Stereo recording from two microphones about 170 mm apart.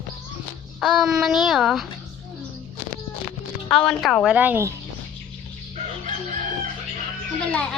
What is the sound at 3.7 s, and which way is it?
Speech, centre (ahead or behind).